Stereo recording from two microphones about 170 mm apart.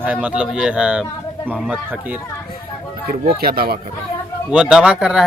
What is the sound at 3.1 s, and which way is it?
Speech, 65° right (ahead or behind).